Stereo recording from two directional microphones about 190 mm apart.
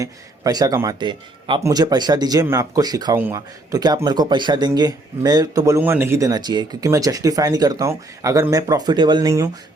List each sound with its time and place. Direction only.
0.0 s a man's voice: 20° right (ahead or behind)